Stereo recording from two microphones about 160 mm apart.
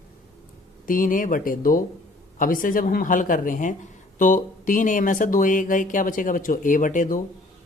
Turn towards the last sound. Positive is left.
turn(degrees=55)  # may be behind; listen again after turning